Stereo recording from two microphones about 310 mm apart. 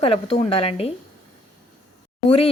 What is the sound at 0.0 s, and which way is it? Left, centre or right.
Speech, centre.